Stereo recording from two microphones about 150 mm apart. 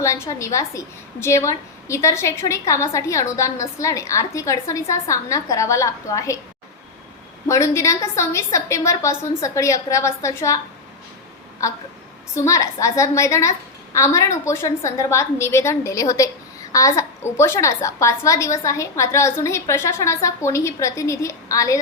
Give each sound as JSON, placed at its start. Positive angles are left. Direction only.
{"t": 0.0, "sound": "a woman's voice", "side_deg": 20}
{"t": 7.4, "sound": "a woman's voice", "side_deg": 20}
{"t": 12.3, "sound": "a woman's voice", "side_deg": 20}